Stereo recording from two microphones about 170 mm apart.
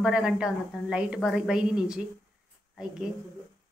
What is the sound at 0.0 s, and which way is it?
A woman's voice, 5° right (ahead or behind).